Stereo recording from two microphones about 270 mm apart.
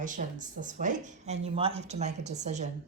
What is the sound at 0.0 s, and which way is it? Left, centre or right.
Speech, right.